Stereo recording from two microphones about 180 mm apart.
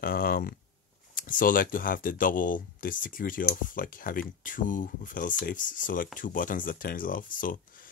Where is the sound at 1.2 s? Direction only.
50° left (ahead or behind).